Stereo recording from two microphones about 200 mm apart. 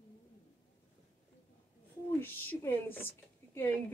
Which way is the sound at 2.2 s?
10° left (ahead or behind).